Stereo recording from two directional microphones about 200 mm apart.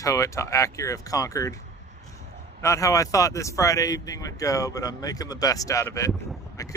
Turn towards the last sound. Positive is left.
turn(degrees=15)  # may be behind; listen again after turning